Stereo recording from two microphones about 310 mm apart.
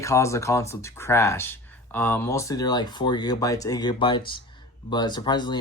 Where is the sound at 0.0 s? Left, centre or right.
Centre.